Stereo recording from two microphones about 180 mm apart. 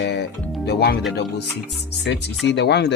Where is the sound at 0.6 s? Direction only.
65° left (ahead or behind).